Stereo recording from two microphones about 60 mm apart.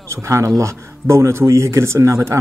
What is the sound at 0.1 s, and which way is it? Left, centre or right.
A man's voice, right.